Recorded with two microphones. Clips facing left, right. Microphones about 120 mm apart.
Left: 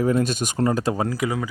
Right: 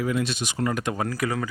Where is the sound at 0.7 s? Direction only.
30° left (ahead or behind); by 1.5 s 15° left (ahead or behind).